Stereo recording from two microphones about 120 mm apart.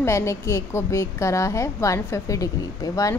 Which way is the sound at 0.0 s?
25° left (ahead or behind).